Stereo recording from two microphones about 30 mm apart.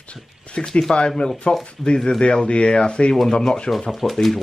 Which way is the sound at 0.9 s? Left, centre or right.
Left.